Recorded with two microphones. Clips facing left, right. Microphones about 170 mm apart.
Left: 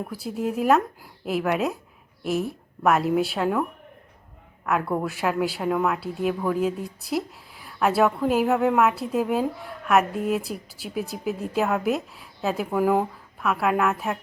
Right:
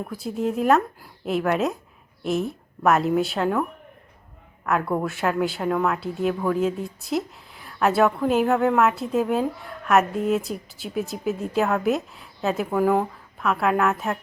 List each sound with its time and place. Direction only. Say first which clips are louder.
0.0 s a woman's voice: right 2 dB; 5° left (ahead or behind)